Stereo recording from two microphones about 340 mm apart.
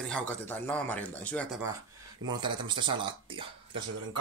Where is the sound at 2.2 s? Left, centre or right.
Centre.